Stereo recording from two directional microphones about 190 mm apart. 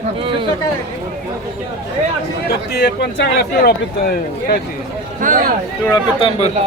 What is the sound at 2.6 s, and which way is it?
A man's voice, 60° left (ahead or behind).